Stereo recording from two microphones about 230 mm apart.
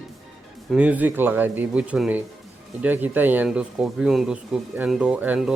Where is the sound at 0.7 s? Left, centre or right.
Centre.